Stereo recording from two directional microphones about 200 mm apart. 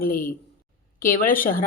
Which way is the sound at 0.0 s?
45° left (ahead or behind).